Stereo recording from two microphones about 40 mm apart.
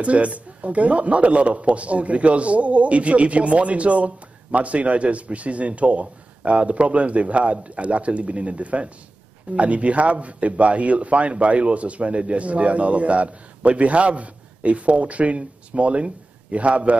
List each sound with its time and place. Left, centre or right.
0.0 s a man's voice: right